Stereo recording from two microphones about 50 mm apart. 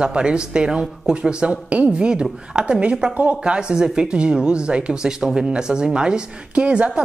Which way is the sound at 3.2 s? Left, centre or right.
Right.